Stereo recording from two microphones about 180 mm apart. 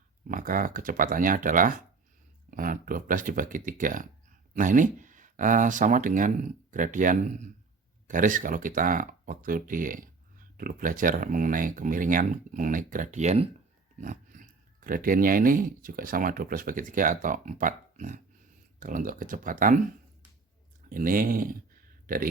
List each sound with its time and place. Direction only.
0.3 s speech: 50° right (ahead or behind)
20.9 s speech: 50° right (ahead or behind)